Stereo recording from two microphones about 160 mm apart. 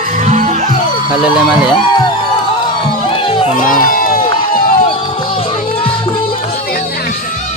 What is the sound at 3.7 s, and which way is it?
Run, 60° left (ahead or behind).